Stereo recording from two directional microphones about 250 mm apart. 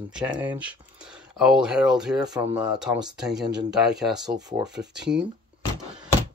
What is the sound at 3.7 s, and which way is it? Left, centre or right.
Speech, centre.